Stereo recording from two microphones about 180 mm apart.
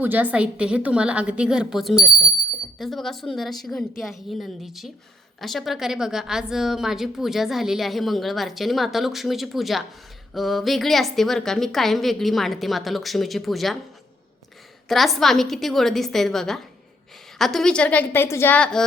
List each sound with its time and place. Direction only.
0.0 s a woman's voice: 10° right (ahead or behind)
14.8 s a woman's voice: centre (ahead or behind)